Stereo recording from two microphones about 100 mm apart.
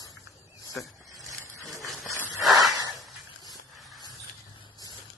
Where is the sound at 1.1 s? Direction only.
35° right (ahead or behind).